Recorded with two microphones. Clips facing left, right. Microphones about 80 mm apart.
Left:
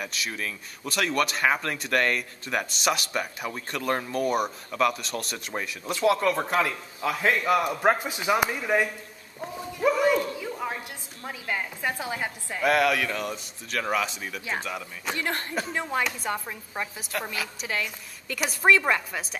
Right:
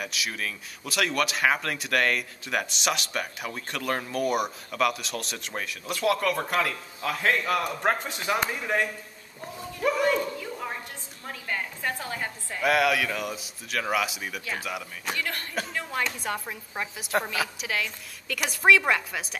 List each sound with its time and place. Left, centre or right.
0.0 s a man's voice: centre
9.4 s a sound: centre
11.2 s a woman's voice: centre
12.6 s speech: centre
15.1 s speech: left
15.9 s speech: centre